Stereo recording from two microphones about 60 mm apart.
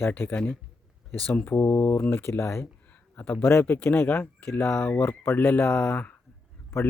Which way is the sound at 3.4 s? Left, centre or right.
Left.